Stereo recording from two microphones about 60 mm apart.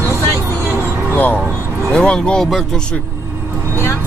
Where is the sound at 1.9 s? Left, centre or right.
Centre.